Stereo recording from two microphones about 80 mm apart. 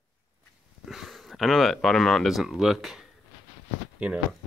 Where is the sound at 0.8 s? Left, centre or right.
Centre.